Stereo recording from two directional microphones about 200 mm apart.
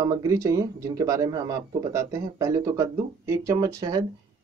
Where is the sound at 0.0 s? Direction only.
15° right (ahead or behind).